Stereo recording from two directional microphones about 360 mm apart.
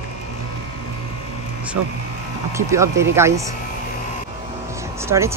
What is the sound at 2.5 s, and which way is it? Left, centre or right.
Speech, centre.